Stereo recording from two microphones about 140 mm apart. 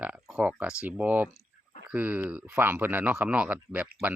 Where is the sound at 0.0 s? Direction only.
5° right (ahead or behind).